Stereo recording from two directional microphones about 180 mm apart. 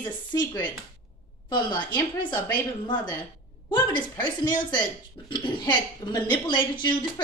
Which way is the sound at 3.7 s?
25° left (ahead or behind).